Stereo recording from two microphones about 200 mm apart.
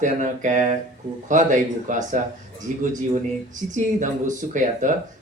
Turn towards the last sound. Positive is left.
turn(degrees=-40)  # may be behind; listen again after turning